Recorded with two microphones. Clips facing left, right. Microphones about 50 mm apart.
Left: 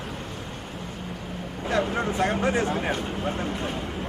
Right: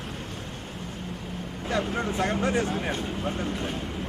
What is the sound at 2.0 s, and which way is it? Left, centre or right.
Speech, centre.